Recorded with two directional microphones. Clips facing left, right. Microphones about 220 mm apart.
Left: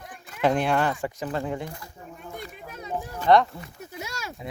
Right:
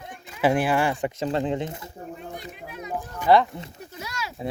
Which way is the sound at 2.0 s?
45° right (ahead or behind).